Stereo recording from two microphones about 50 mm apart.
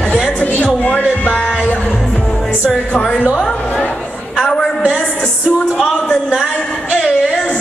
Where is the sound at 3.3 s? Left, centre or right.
Centre.